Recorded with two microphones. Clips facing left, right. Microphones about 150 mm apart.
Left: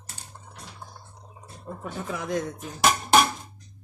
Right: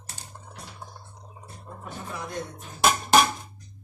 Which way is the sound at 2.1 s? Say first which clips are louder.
Left 6 dB; 90° left.